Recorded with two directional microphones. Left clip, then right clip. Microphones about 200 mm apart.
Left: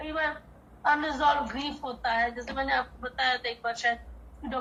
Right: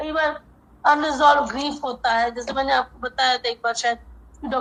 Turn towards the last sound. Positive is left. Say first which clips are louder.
# right 9 dB
turn(degrees=-45)  # may be behind; listen again after turning